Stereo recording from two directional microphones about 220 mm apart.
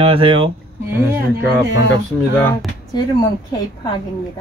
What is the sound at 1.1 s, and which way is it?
Speech, 10° right (ahead or behind).